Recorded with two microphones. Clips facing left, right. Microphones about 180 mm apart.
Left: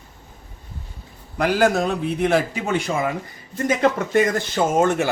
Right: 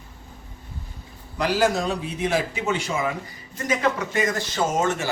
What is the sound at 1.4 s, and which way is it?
Speech, 55° left (ahead or behind).